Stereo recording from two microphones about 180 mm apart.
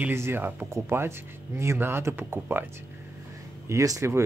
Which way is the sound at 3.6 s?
15° right (ahead or behind).